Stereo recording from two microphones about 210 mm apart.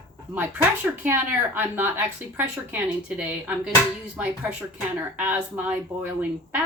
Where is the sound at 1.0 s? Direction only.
10° right (ahead or behind).